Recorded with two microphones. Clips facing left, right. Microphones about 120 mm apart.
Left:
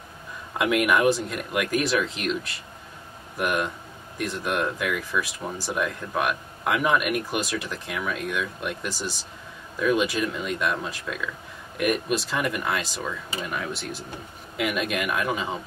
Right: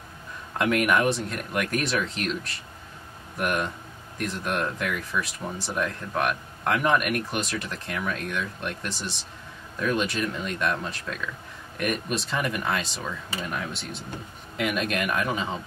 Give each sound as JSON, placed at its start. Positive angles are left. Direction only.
{"t": 0.6, "sound": "speech", "side_deg": 0}